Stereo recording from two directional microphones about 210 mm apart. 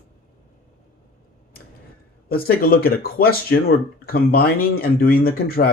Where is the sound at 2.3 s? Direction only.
45° left (ahead or behind).